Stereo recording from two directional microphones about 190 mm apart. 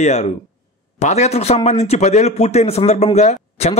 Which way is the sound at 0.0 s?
35° left (ahead or behind).